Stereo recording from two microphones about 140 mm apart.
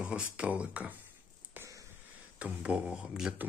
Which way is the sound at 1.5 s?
20° right (ahead or behind).